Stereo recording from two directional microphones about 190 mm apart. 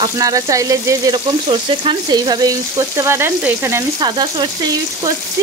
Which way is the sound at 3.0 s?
15° right (ahead or behind).